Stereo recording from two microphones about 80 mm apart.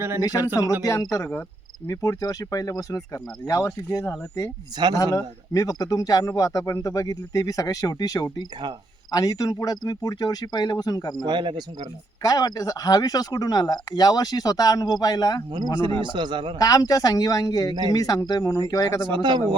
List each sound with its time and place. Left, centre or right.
0.2 s speech: left
11.3 s speech: right
12.2 s speech: left
16.0 s a man's voice: right
16.6 s speech: left
19.0 s a man's voice: right